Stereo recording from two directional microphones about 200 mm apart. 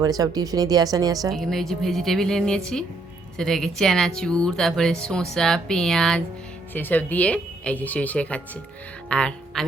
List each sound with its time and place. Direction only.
0.0 s speech: 20° right (ahead or behind)
1.3 s speech: centre (ahead or behind)